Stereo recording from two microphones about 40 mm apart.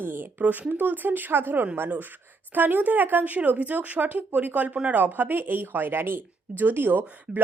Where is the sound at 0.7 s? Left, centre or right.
Right.